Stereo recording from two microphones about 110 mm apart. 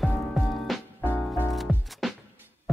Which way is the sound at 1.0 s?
15° left (ahead or behind).